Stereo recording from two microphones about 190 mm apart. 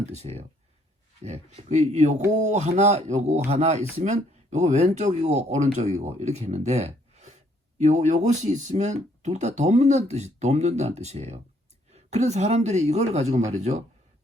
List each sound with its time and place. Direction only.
0.1 s speech: 35° right (ahead or behind)